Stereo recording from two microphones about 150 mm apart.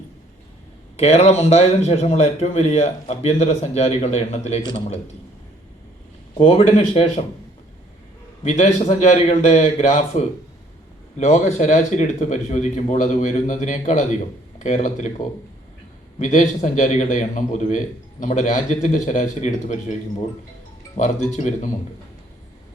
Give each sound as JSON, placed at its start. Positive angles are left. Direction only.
{"t": 0.9, "sound": "a man's voice", "side_deg": 45}
{"t": 6.4, "sound": "a man's voice", "side_deg": 40}
{"t": 8.4, "sound": "a man's voice", "side_deg": 45}
{"t": 16.1, "sound": "a man's voice", "side_deg": 50}